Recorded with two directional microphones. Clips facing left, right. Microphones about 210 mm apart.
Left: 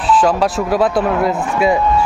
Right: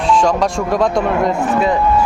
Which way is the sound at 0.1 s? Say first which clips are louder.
Left 1 dB; 5° left (ahead or behind).